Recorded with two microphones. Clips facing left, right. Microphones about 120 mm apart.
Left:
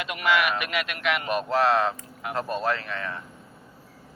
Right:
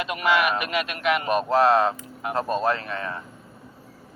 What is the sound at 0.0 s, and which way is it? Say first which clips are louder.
Speech: right 2 dB; 30° right (ahead or behind).